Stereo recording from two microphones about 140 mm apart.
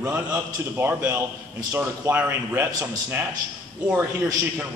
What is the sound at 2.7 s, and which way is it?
Speech, 30° right (ahead or behind).